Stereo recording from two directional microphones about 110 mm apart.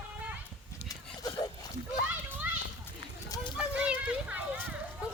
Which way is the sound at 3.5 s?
10° right (ahead or behind).